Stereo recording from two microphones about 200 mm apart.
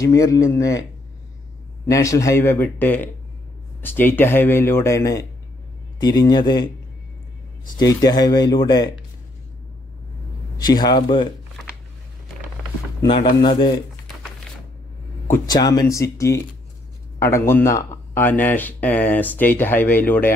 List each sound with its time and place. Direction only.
0.0 s speech: 15° left (ahead or behind)
1.9 s speech: 15° left (ahead or behind)
7.8 s speech: 15° left (ahead or behind)
10.6 s speech: 20° left (ahead or behind)
13.0 s speech: 25° left (ahead or behind)
15.4 s speech: 20° left (ahead or behind)